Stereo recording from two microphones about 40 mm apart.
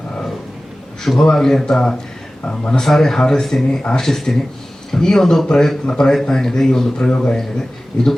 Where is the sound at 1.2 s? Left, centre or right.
Centre.